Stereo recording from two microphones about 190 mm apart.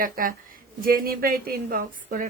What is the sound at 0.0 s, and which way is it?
Speech, 45° right (ahead or behind).